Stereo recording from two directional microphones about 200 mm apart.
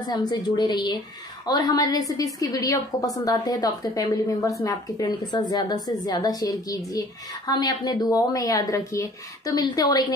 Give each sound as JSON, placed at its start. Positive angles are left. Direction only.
{"t": 0.1, "sound": "a woman's voice", "side_deg": 20}